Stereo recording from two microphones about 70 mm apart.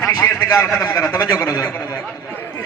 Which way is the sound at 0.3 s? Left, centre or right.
Left.